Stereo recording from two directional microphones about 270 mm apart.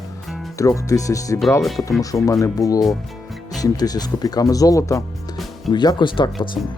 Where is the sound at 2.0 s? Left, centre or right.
Centre.